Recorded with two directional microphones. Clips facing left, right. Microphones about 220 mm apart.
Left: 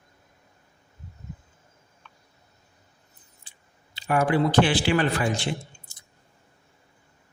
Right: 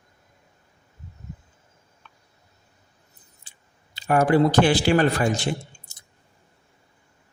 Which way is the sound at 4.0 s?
45° right (ahead or behind).